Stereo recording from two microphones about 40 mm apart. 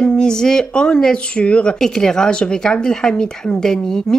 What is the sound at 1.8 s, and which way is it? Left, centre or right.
Speech, centre.